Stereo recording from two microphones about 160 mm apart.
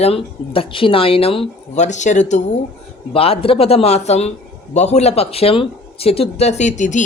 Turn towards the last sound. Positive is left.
turn(degrees=50)  # may be behind; listen again after turning